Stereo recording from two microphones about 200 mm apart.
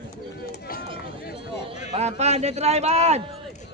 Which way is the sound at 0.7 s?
45° left (ahead or behind).